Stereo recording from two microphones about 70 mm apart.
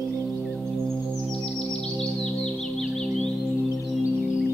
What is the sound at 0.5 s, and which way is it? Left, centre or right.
Music, centre.